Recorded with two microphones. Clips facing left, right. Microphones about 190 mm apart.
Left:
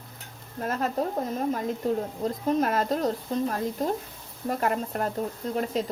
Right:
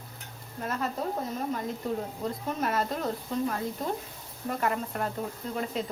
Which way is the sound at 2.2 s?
40° left (ahead or behind).